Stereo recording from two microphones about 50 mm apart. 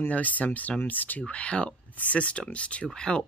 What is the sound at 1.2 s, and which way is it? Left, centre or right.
Speech, left.